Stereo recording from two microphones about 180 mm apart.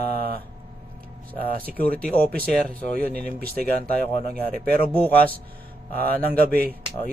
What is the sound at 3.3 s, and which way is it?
Speech, 55° right (ahead or behind).